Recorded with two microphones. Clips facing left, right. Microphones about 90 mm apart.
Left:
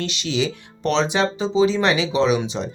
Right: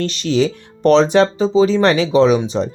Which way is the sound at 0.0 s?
45° right (ahead or behind).